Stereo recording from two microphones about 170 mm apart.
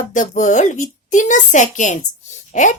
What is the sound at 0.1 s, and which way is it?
Speech, 45° left (ahead or behind).